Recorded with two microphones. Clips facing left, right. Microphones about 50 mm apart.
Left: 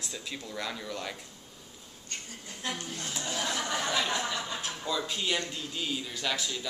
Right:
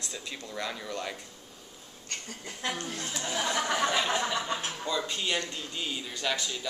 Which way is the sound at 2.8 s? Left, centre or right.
Right.